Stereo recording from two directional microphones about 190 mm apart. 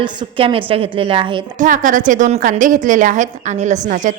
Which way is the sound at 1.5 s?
40° right (ahead or behind).